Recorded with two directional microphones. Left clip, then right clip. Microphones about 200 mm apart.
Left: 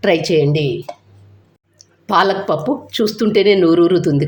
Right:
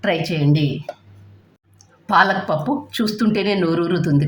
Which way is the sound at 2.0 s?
15° left (ahead or behind).